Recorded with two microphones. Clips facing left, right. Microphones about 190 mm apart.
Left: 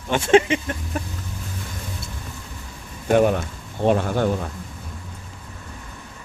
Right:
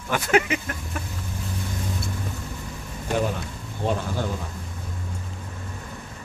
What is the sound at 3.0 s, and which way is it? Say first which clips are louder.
Speech: left 8 dB; 60° left (ahead or behind).